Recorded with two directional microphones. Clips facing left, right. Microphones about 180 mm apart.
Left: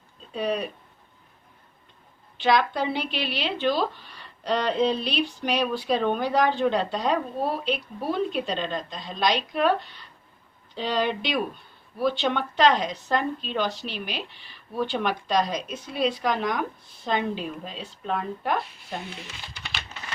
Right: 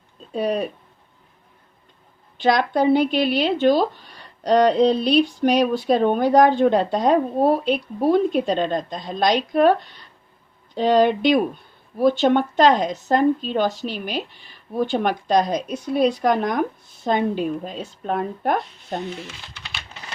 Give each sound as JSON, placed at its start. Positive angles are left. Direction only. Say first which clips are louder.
{"t": 0.3, "sound": "speech", "louder": "right 5 dB", "side_deg": -45}
{"t": 2.4, "sound": "speech", "louder": "right 5 dB", "side_deg": -45}
{"t": 10.8, "sound": "speech", "louder": "right 9 dB", "side_deg": -45}